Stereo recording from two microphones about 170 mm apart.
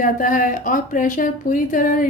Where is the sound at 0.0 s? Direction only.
50° left (ahead or behind).